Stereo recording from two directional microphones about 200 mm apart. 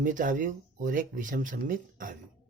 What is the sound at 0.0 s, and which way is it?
Speech, 40° right (ahead or behind).